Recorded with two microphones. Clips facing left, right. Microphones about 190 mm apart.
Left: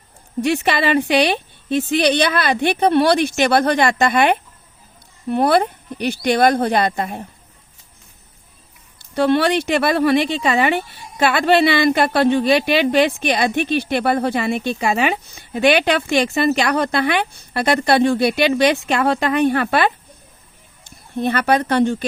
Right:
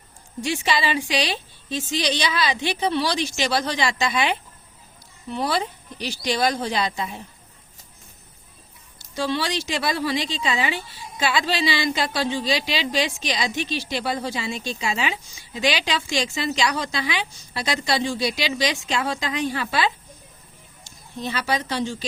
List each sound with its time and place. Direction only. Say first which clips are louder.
0.4 s speech: left 6 dB; 60° left (ahead or behind)
9.0 s speech: left 9 dB; 60° left (ahead or behind)